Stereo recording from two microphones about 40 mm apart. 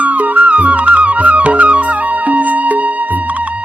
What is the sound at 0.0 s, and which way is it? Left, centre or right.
Music, right.